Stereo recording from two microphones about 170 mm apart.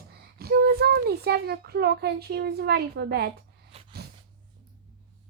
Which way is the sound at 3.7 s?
35° right (ahead or behind).